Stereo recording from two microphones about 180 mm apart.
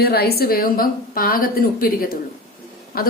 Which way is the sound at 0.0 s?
60° left (ahead or behind).